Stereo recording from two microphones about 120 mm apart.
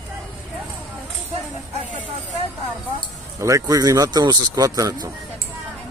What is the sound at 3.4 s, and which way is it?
Speech, 25° right (ahead or behind).